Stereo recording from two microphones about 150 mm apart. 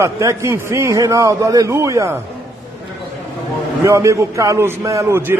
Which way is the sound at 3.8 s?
20° right (ahead or behind).